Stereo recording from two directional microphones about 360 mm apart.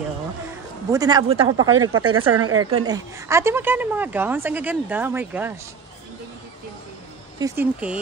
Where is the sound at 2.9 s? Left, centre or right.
Centre.